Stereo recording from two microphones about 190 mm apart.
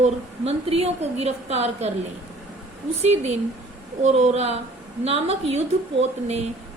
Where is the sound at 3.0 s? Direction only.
35° right (ahead or behind).